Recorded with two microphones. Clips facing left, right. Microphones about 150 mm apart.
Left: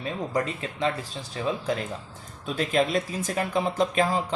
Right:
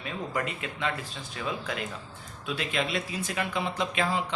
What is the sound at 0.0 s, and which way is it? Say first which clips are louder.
Speech: left 4 dB; 35° left (ahead or behind).